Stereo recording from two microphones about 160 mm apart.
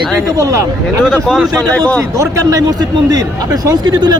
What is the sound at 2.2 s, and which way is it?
Speech, 20° right (ahead or behind).